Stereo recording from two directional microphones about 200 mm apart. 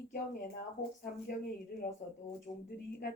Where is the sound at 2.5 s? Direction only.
20° left (ahead or behind).